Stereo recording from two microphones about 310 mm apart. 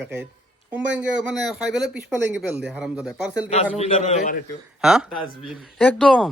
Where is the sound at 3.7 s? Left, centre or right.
Left.